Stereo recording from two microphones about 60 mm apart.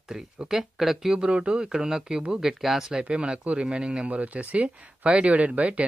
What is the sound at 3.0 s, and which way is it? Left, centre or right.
Speech, centre.